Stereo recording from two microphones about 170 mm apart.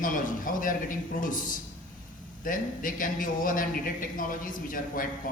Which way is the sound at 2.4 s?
55° left (ahead or behind).